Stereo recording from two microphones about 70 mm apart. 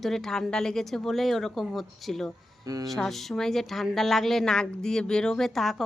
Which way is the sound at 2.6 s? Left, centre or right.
Right.